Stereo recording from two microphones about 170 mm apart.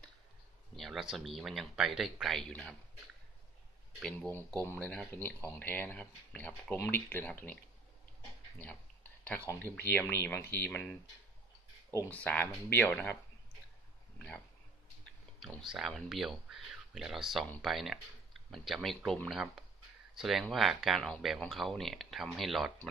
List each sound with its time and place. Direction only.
0.7 s speech: centre (ahead or behind)
4.0 s speech: 5° left (ahead or behind)
9.5 s speech: 10° left (ahead or behind)
14.1 s a sound: 5° left (ahead or behind)
15.4 s speech: centre (ahead or behind)